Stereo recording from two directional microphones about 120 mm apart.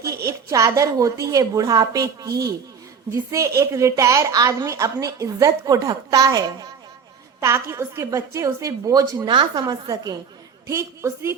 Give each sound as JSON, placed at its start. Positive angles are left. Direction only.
{"t": 0.0, "sound": "a woman's voice", "side_deg": -25}